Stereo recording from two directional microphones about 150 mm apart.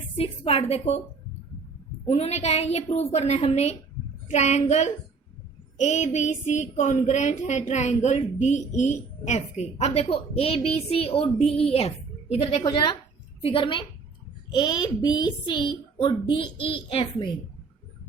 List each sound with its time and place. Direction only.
0.2 s a child's voice: 40° left (ahead or behind)
2.0 s a sound: 45° left (ahead or behind)
13.4 s a child's voice: 35° left (ahead or behind)